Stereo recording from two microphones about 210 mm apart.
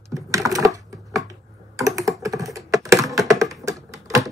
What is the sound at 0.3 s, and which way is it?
Typing, 15° right (ahead or behind).